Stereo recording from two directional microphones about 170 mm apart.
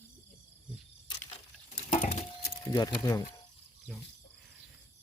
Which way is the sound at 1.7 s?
45° left (ahead or behind).